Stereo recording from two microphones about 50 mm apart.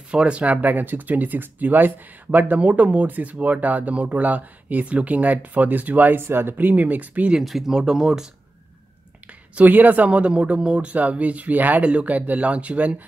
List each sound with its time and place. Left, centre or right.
0.1 s speech: right
6.2 s speech: right
6.5 s speech: right
7.4 s speech: centre
9.6 s speech: right